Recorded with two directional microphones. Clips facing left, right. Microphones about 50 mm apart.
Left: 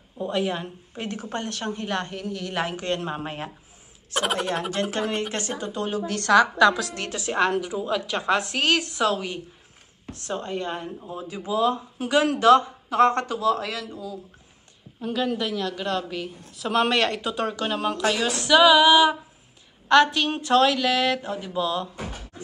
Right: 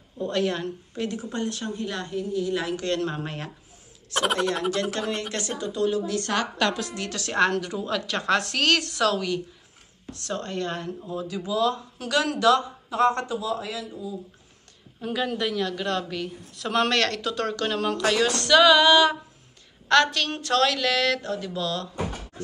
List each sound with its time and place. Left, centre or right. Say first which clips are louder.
0.2 s speech: even; centre
1.1 s a woman's voice: right 1 dB; left
2.2 s a woman's voice: right 4 dB; left
2.5 s speech: even; left
2.8 s speech: right 1 dB; left
7.1 s speech: even; centre
11.1 s speech: even; left
13.4 s speech: left 5 dB; left
15.0 s speech: left 1 dB; centre